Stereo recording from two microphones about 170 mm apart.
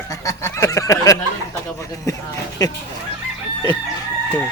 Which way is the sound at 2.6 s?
20° left (ahead or behind).